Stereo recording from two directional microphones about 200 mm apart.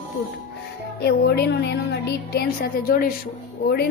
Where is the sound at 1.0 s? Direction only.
55° left (ahead or behind).